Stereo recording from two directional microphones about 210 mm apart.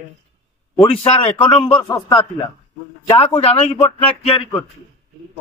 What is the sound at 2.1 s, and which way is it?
A man's voice, 20° left (ahead or behind).